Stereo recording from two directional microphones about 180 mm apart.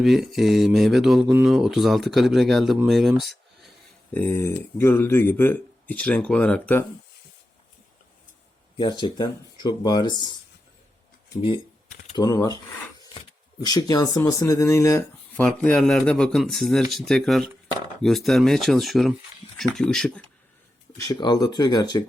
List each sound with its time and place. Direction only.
0.0 s speech: centre (ahead or behind)
4.1 s speech: 10° left (ahead or behind)
8.8 s speech: 25° left (ahead or behind)
11.3 s speech: 30° left (ahead or behind)
13.7 s speech: 20° left (ahead or behind)
15.4 s speech: centre (ahead or behind)
21.0 s speech: 25° left (ahead or behind)